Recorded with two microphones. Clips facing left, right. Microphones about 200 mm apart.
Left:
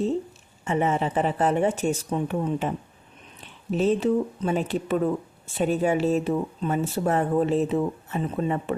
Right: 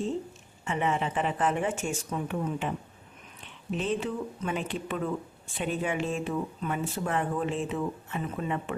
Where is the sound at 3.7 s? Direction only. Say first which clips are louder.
Left 9 dB; 40° left (ahead or behind).